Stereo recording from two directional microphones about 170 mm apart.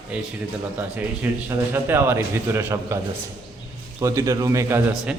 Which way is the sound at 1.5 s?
15° right (ahead or behind).